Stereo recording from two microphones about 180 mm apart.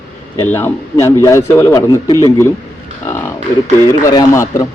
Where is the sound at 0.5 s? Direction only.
15° left (ahead or behind).